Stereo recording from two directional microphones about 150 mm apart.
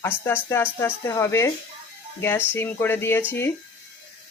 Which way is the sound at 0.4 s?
20° left (ahead or behind).